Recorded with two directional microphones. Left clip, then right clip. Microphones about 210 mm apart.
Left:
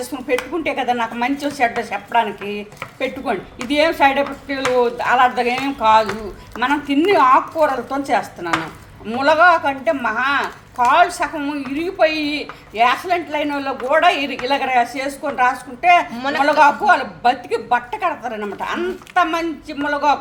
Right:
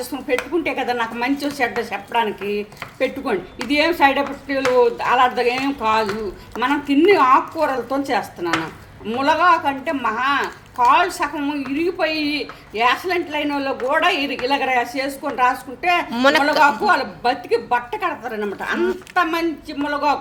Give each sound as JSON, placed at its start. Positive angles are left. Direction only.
{"t": 0.0, "sound": "speech", "side_deg": 0}
{"t": 16.1, "sound": "a man's voice", "side_deg": -45}
{"t": 16.4, "sound": "speech", "side_deg": 0}